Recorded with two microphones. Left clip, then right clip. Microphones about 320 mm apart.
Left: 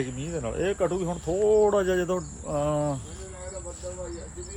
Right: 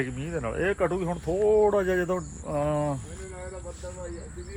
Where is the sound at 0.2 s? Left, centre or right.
Centre.